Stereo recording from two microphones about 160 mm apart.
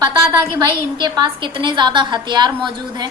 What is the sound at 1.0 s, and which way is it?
A woman's voice, 30° right (ahead or behind).